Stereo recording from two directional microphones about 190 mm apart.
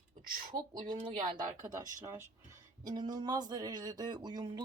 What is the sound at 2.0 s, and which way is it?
Speech, 15° right (ahead or behind).